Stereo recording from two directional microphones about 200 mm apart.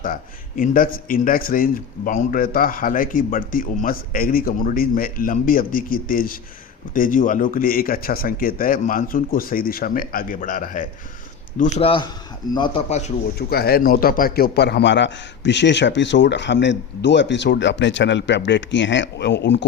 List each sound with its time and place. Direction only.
0.0 s a man's voice: 40° left (ahead or behind); by 12.8 s 25° left (ahead or behind)
12.9 s a man's voice: 35° left (ahead or behind)
13.5 s a man's voice: 50° left (ahead or behind)